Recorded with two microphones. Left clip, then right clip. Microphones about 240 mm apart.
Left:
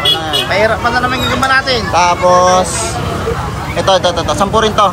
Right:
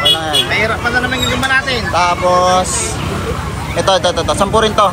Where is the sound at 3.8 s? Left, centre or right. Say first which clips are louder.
Left 1 dB; centre.